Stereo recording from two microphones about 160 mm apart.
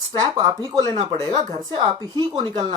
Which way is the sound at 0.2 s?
25° right (ahead or behind).